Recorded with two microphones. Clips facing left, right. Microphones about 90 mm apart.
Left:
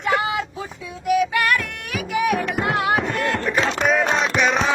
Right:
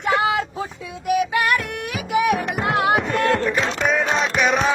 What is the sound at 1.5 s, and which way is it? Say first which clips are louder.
Music: right 1 dB; 20° right (ahead or behind).